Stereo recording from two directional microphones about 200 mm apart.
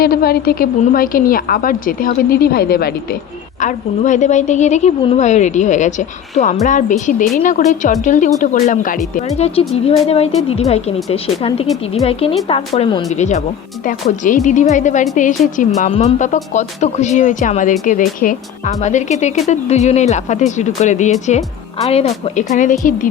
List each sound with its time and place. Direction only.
0.0 s a woman's voice: 50° left (ahead or behind)
3.6 s speech: 40° left (ahead or behind)